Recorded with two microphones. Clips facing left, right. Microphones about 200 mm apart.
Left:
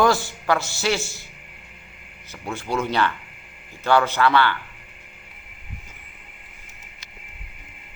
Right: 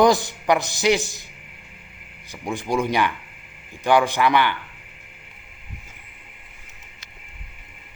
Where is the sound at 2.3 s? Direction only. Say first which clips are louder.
Right 3 dB; 15° right (ahead or behind).